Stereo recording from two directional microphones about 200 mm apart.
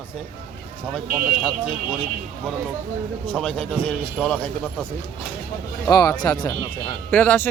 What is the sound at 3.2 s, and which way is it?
Speech, 5° left (ahead or behind).